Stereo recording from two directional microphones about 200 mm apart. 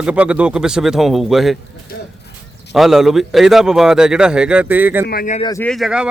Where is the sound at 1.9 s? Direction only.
50° left (ahead or behind).